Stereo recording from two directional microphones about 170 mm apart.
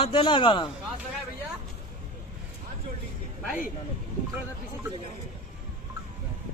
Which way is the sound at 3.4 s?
5° right (ahead or behind).